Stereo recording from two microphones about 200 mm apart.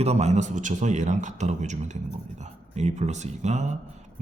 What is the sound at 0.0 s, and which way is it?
Speech, 35° right (ahead or behind).